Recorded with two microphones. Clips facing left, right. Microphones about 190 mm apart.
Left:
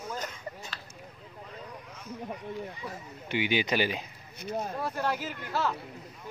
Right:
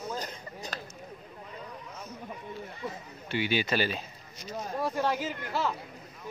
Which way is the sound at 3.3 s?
15° left (ahead or behind).